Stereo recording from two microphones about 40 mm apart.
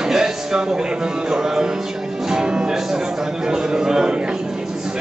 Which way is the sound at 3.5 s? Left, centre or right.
Centre.